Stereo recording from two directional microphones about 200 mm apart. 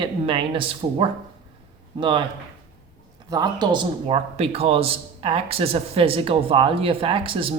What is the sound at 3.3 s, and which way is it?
A man's voice, 20° right (ahead or behind).